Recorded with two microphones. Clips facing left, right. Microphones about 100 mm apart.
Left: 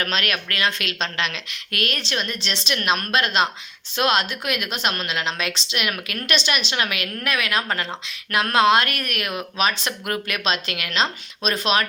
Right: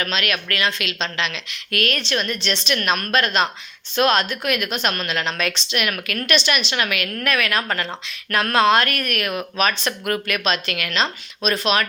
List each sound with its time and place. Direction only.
0.0 s a woman's voice: 40° left (ahead or behind)
1.7 s a woman's voice: 30° left (ahead or behind)